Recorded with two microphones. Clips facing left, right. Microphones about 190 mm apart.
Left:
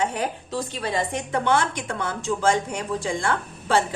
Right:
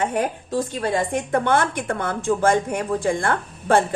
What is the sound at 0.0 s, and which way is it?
A woman's voice, 50° right (ahead or behind).